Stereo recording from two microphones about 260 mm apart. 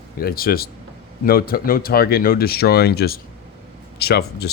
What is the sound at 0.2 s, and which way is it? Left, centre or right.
Speech, left.